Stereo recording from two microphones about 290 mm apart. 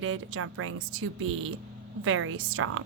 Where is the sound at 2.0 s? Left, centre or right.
Right.